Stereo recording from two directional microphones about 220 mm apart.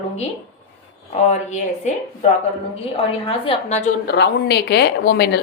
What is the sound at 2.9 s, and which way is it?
Speech, 25° left (ahead or behind).